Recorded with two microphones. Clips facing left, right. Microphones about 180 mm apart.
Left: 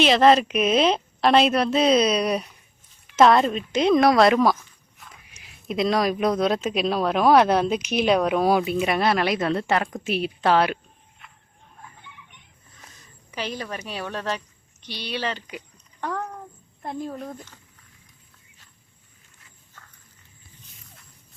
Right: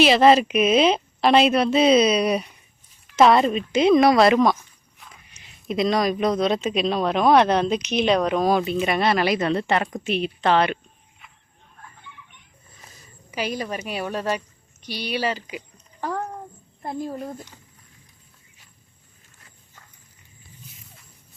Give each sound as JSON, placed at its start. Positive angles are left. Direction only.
{"t": 0.0, "sound": "speech", "side_deg": -5}
{"t": 4.9, "sound": "walk", "side_deg": 0}
{"t": 5.6, "sound": "speech", "side_deg": 0}
{"t": 13.3, "sound": "a woman's voice", "side_deg": -10}
{"t": 19.8, "sound": "horse", "side_deg": -15}